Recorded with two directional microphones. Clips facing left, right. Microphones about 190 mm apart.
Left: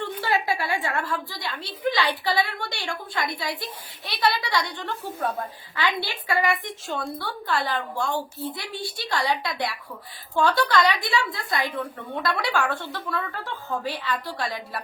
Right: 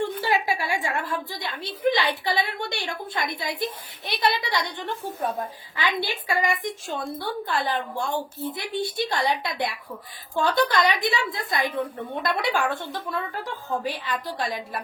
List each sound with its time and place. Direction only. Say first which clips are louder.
0.2 s a woman's voice: even; 15° right (ahead or behind)
5.7 s a woman's voice: even; 15° right (ahead or behind)